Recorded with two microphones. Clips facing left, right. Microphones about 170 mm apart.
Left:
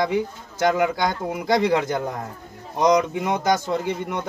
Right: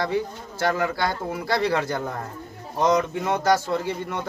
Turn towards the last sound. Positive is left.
turn(degrees=20)  # may be behind; listen again after turning